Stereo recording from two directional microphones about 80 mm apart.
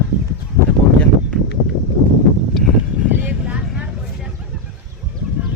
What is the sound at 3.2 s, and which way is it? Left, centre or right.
Vehicle, centre.